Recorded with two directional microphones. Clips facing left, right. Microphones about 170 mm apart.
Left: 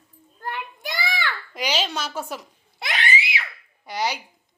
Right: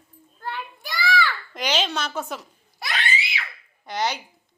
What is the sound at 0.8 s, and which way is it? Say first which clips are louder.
Child singing: right 8 dB; 20° left (ahead or behind).